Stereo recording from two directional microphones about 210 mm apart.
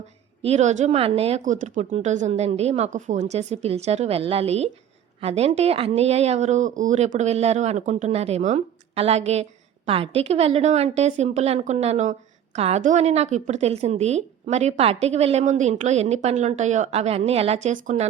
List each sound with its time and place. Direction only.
0.4 s speech: 30° right (ahead or behind)